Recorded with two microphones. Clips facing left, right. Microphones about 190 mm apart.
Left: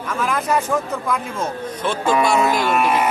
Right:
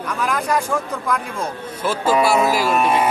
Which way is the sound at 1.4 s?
5° right (ahead or behind).